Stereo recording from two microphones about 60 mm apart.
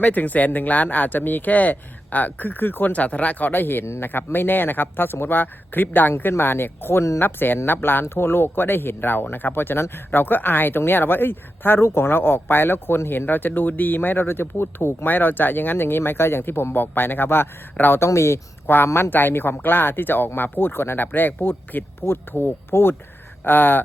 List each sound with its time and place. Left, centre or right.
0.0 s speech: left
18.0 s speech: left
18.6 s speech: left